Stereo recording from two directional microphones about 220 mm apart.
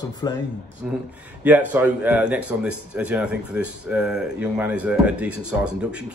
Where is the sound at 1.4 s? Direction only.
10° right (ahead or behind).